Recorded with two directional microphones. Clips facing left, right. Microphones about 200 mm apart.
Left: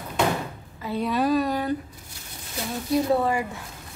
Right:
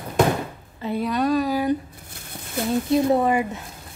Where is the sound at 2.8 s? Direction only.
20° right (ahead or behind).